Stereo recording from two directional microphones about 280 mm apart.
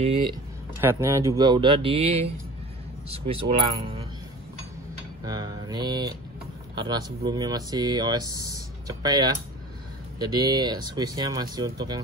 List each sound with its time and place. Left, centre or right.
0.0 s speech: centre
0.7 s speech: centre
3.4 s speech: centre
5.2 s speech: centre